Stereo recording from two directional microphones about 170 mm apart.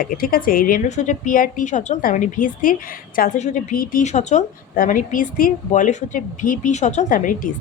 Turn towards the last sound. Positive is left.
turn(degrees=50)  # may be behind; listen again after turning